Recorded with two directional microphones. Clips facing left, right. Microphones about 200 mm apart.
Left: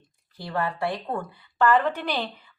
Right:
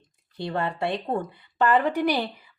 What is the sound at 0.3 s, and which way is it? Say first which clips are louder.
Speech: right 1 dB; 25° right (ahead or behind).